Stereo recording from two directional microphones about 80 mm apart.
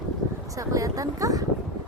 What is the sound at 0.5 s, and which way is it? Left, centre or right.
Speech, right.